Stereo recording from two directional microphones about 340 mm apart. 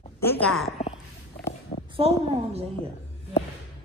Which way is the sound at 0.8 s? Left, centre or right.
Left.